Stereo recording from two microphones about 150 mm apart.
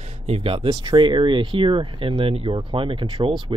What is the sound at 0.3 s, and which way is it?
Speech, 40° right (ahead or behind).